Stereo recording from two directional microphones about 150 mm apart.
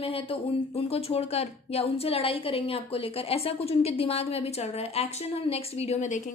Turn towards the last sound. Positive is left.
turn(degrees=50)  # may be behind; listen again after turning